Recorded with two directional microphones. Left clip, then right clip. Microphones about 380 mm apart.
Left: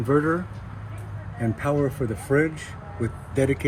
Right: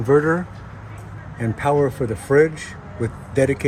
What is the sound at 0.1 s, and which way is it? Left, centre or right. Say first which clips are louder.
Speech: right 6 dB; right.